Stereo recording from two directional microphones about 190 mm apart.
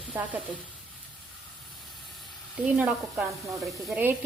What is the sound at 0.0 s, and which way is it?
Stir, 10° right (ahead or behind).